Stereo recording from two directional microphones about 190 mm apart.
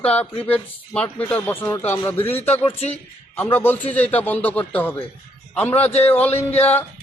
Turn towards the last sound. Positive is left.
turn(degrees=10)  # may be behind; listen again after turning